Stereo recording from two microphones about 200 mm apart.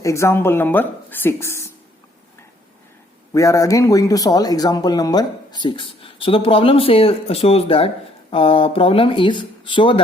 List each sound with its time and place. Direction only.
0.0 s a woman's voice: 15° left (ahead or behind)
3.3 s speech: 15° left (ahead or behind)